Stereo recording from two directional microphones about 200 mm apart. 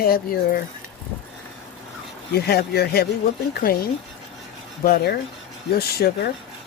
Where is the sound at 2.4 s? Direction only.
50° left (ahead or behind).